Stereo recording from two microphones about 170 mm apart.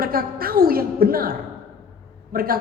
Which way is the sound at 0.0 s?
60° right (ahead or behind).